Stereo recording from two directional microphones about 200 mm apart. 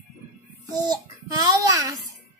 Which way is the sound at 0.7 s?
20° right (ahead or behind).